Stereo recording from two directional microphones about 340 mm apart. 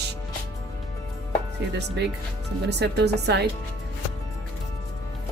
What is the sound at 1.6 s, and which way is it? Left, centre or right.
A woman's voice, right.